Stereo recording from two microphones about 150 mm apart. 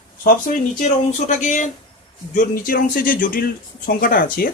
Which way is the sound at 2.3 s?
75° left (ahead or behind).